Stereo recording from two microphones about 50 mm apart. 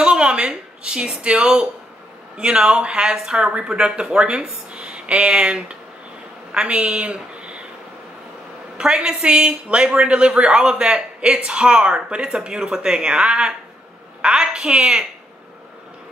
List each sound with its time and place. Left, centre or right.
0.0 s a sound: right
0.5 s a woman's voice: centre
8.7 s speech: centre